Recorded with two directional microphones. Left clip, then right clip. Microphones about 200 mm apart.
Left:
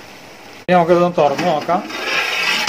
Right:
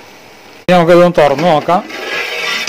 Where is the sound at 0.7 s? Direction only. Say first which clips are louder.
Right 6 dB; 50° right (ahead or behind).